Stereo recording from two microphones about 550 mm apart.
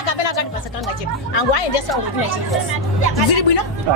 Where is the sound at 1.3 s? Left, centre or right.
Left.